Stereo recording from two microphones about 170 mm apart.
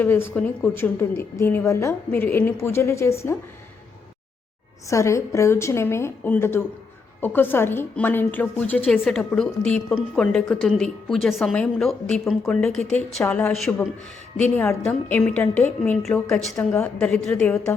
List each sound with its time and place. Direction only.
0.0 s a woman's voice: 10° left (ahead or behind)
4.9 s a woman's voice: 15° left (ahead or behind)
16.6 s a woman's voice: 15° left (ahead or behind)
17.1 s a woman's voice: 5° left (ahead or behind)